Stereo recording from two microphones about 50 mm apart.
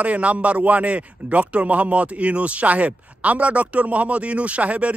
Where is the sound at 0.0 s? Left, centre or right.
Right.